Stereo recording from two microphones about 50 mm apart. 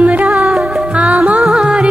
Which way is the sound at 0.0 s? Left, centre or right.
Right.